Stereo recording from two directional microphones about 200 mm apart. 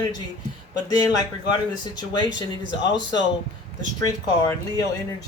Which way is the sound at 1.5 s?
20° left (ahead or behind).